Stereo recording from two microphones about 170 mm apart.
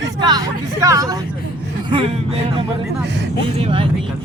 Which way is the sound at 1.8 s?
30° right (ahead or behind).